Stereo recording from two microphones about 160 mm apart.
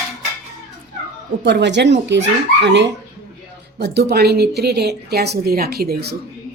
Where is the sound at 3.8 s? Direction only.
90° right.